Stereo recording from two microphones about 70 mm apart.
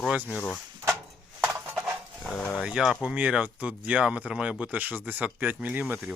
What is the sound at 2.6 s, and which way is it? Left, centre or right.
Speech, centre.